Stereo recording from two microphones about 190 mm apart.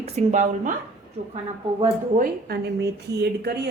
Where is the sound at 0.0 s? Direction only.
35° right (ahead or behind).